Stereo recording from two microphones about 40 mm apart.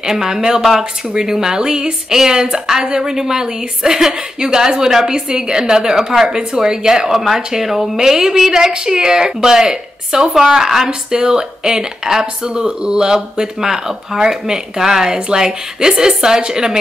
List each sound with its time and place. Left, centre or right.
0.0 s speech: centre